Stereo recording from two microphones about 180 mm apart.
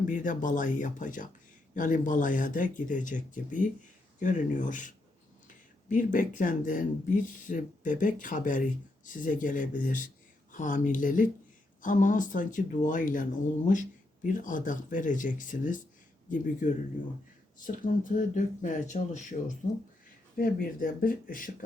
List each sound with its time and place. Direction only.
0.1 s speech: 45° left (ahead or behind)
14.3 s speech: 45° left (ahead or behind)